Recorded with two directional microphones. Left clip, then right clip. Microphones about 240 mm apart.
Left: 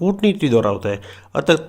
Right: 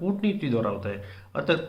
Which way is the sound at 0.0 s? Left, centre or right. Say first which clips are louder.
Left 10 dB; left.